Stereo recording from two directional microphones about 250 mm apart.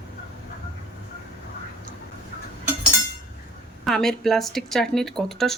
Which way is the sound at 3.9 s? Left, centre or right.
Centre.